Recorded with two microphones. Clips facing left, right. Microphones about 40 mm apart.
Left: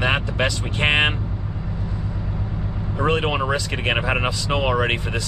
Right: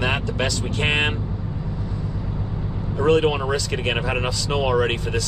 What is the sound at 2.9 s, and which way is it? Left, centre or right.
Speech, centre.